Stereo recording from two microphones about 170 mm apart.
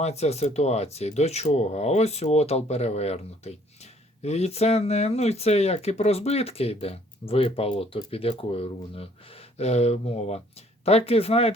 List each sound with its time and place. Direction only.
0.0 s speech: 40° left (ahead or behind)